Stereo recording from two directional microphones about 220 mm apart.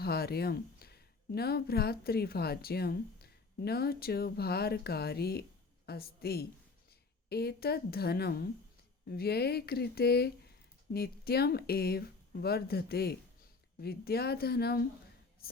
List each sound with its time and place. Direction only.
0.0 s speech: 45° left (ahead or behind)